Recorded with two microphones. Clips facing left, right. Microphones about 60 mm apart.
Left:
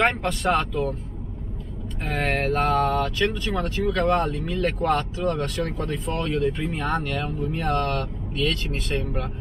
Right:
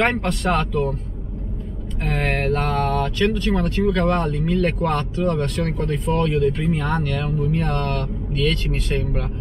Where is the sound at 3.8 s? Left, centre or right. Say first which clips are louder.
Right 5 dB; right.